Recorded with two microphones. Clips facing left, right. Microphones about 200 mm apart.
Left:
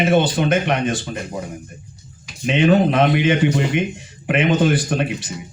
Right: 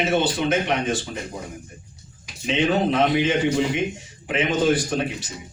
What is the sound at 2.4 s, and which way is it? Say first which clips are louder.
Speech: left 5 dB; 60° left (ahead or behind).